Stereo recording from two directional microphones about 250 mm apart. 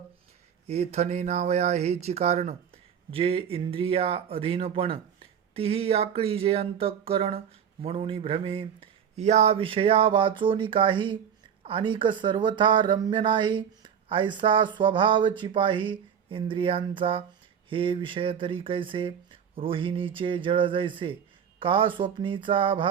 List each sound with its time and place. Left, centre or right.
0.7 s speech: right